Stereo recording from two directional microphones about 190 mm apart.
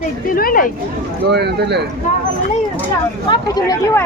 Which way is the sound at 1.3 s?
60° right (ahead or behind).